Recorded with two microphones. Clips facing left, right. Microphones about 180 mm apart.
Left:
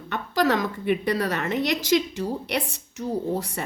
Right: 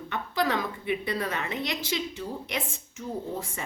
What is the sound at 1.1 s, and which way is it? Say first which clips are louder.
Speech: left 6 dB; 75° left (ahead or behind).